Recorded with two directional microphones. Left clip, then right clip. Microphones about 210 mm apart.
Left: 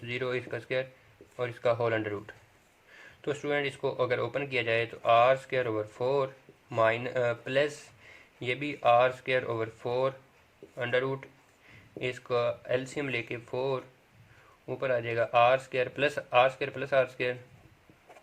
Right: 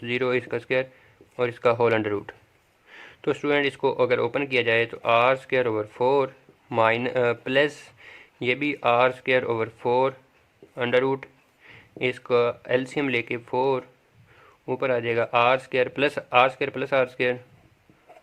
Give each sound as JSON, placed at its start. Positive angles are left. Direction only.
{"t": 0.0, "sound": "speech", "side_deg": -40}